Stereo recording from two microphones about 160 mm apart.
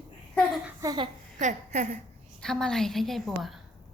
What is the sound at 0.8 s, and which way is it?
Speech, 25° right (ahead or behind).